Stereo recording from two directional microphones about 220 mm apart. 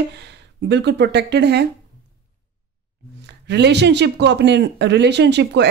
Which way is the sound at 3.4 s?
50° right (ahead or behind).